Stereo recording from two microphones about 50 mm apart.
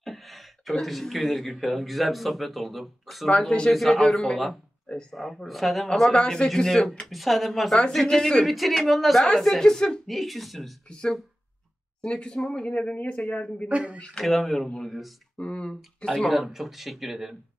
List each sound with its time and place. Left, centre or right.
0.0 s speech: centre
3.3 s speech: centre
7.1 s speech: centre
8.5 s speech: centre
10.0 s speech: centre
10.9 s speech: centre
12.6 s speech: left
13.7 s speech: right
14.2 s speech: centre
15.3 s speech: centre
16.1 s speech: centre